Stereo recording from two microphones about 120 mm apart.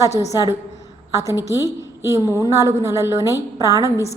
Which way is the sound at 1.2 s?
30° left (ahead or behind).